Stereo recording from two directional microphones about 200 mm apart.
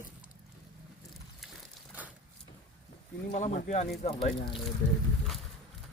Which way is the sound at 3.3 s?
35° left (ahead or behind).